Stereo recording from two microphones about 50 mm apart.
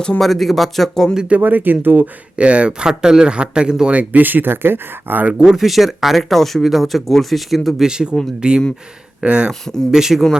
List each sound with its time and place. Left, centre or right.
0.2 s speech: centre
1.4 s speech: right
2.3 s speech: right
3.9 s speech: right
5.4 s speech: centre
7.8 s speech: centre
9.9 s speech: centre